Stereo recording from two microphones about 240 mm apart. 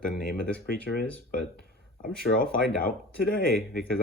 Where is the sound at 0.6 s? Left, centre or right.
Left.